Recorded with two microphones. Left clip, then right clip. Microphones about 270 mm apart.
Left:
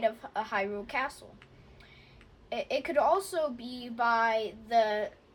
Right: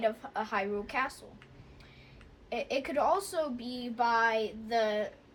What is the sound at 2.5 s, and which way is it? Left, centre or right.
Child singing, left.